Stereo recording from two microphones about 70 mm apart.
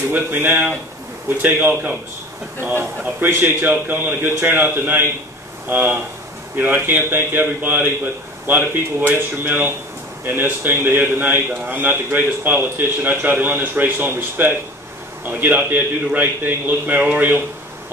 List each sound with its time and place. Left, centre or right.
0.1 s a man's voice: right